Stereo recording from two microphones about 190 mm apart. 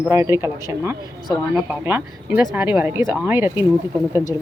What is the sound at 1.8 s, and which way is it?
Speech, 10° right (ahead or behind).